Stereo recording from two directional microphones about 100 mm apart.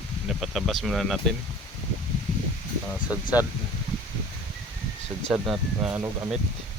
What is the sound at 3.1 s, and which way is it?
Speech, 15° right (ahead or behind).